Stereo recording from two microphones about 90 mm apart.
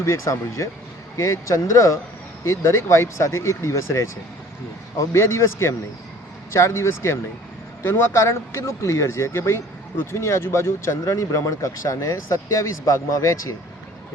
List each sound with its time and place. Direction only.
0.0 s speech: 35° left (ahead or behind)